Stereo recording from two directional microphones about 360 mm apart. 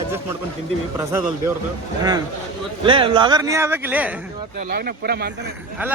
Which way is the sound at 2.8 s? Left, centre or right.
Centre.